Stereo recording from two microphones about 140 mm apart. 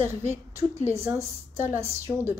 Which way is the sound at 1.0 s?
20° right (ahead or behind).